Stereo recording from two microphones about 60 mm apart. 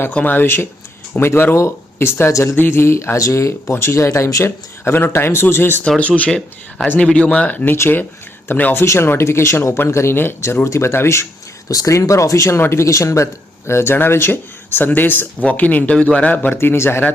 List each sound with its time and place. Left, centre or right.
0.1 s speech: left
2.3 s speech: left
2.6 s speech: left
4.4 s speech: left
6.0 s speech: left
8.8 s speech: left
11.7 s speech: left
11.9 s speech: left
12.5 s speech: left
13.7 s speech: left
16.6 s speech: left